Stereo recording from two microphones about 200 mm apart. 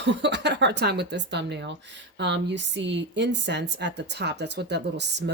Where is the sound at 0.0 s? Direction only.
60° right (ahead or behind).